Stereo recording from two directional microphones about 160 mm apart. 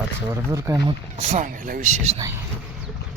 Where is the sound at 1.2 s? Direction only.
50° right (ahead or behind).